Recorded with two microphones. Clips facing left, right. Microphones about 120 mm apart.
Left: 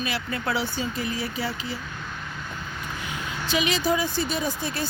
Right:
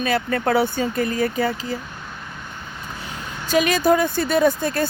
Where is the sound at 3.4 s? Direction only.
45° right (ahead or behind).